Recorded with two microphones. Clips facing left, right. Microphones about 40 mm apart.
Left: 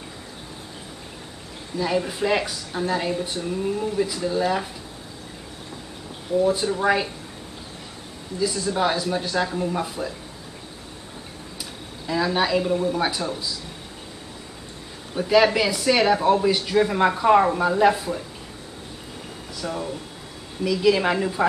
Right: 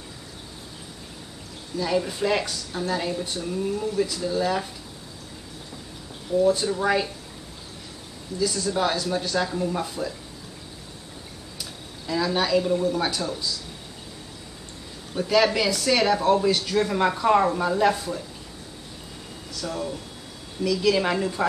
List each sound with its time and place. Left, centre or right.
1.8 s speech: centre
6.3 s speech: centre
8.4 s speech: centre
12.1 s speech: centre
15.1 s speech: centre
19.5 s speech: centre